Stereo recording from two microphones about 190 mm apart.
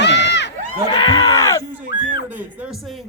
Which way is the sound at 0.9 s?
25° left (ahead or behind).